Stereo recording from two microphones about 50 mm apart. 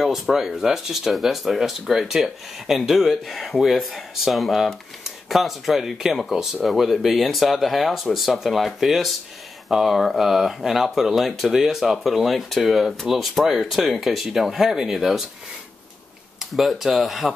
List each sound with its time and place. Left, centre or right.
0.0 s speech: centre
16.3 s speech: centre